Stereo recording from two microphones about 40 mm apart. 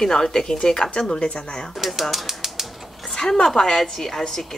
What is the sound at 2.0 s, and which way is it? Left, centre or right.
Speech, centre.